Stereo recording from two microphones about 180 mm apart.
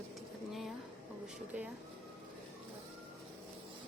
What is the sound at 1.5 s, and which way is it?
Speech, 10° right (ahead or behind).